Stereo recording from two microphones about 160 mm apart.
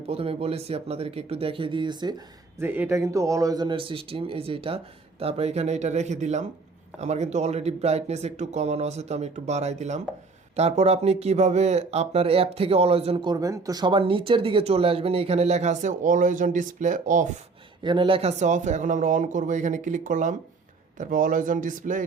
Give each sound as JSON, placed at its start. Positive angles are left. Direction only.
{"t": 0.1, "sound": "speech", "side_deg": -40}
{"t": 2.6, "sound": "speech", "side_deg": -15}
{"t": 17.8, "sound": "speech", "side_deg": -30}